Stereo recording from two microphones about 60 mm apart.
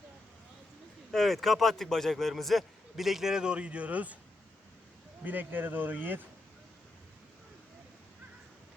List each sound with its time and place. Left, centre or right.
1.1 s a man's voice: centre; by 4.2 s right
5.2 s speech: right